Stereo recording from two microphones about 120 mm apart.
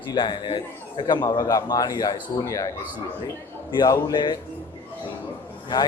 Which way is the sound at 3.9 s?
40° left (ahead or behind).